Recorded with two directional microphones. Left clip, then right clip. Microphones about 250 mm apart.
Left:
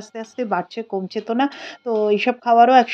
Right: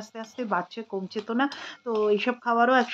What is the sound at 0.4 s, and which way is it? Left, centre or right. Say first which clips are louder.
Speech: left 6 dB; left.